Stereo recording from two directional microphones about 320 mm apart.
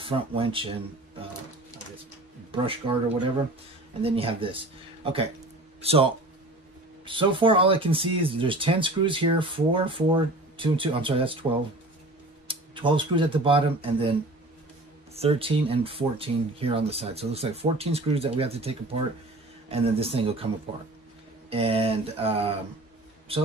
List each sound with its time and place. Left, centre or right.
0.0 s speech: centre
2.5 s speech: centre
5.8 s speech: centre
12.4 s speech: centre
15.1 s speech: centre
21.5 s speech: centre